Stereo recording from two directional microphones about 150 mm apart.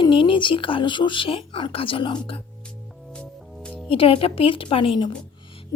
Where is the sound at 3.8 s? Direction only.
40° left (ahead or behind).